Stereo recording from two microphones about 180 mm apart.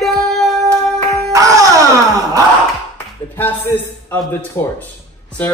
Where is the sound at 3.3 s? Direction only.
10° left (ahead or behind).